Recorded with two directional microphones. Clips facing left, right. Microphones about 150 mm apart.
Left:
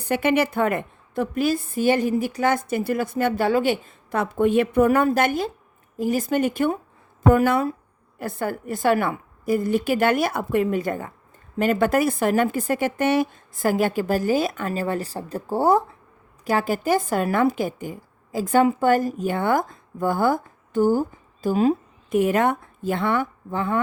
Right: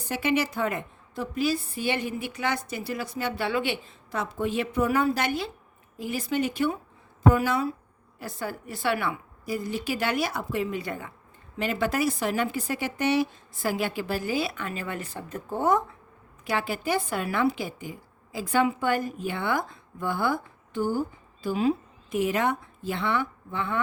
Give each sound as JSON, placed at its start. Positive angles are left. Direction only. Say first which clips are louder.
{"t": 0.0, "sound": "a woman's voice", "louder": "left 6 dB", "side_deg": 55}